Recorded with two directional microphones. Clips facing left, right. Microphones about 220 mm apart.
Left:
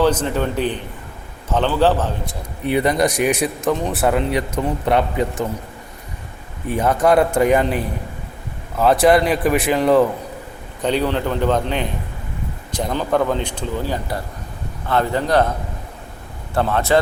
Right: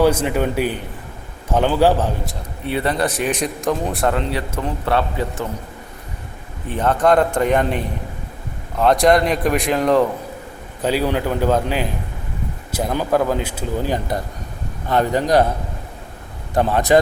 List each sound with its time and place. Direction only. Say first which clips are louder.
0.0 s a man's voice: right 1 dB; 10° right (ahead or behind)
2.6 s speech: left 3 dB; 15° left (ahead or behind)
6.7 s a man's voice: even; 10° left (ahead or behind)
10.8 s a man's voice: even; 10° right (ahead or behind)
16.6 s a man's voice: right 2 dB; 15° right (ahead or behind)